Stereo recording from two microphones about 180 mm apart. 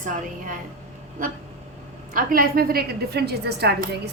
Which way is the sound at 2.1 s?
50° right (ahead or behind).